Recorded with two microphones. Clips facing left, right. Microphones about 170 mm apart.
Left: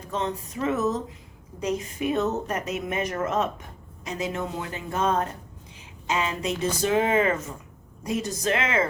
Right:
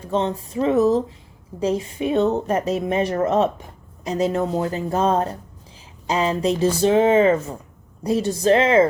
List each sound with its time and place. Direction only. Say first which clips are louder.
0.1 s a woman's voice: right 7 dB; 30° right (ahead or behind)